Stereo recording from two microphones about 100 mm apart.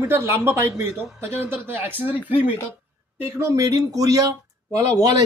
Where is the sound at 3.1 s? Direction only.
30° right (ahead or behind).